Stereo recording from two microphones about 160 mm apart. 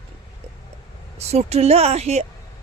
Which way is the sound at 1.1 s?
40° right (ahead or behind).